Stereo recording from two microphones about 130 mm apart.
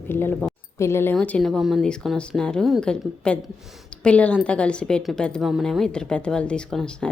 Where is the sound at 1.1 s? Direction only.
5° left (ahead or behind).